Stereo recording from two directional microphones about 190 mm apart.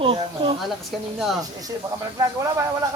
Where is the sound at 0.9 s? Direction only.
Centre (ahead or behind).